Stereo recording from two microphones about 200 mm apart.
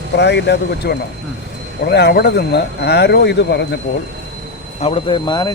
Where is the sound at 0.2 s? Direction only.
60° left (ahead or behind).